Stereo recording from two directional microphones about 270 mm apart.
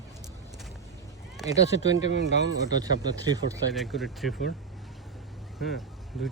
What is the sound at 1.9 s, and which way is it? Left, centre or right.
Speech, right.